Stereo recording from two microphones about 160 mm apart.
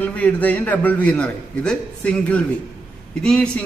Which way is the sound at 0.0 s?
10° left (ahead or behind).